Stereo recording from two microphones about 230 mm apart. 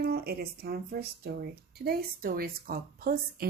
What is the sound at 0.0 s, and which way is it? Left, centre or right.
Speech, right.